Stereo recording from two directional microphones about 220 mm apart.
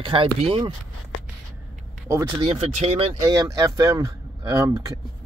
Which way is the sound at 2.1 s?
15° right (ahead or behind).